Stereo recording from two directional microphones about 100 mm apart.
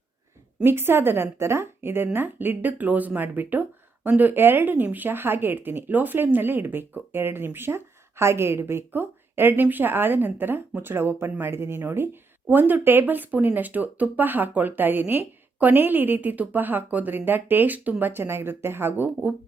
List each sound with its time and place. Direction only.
0.6 s speech: 25° right (ahead or behind)